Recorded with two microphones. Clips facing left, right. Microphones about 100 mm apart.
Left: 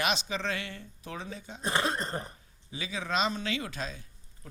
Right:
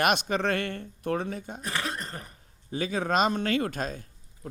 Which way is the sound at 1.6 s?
30° left (ahead or behind).